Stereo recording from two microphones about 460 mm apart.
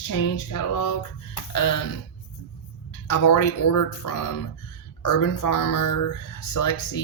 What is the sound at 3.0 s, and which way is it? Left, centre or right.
Speech, left.